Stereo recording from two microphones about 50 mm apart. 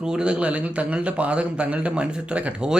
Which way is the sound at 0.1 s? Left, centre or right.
Right.